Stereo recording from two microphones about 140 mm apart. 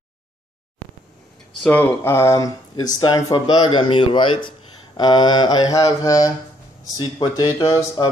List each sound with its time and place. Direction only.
1.6 s speech: 10° left (ahead or behind); by 8.1 s 25° left (ahead or behind)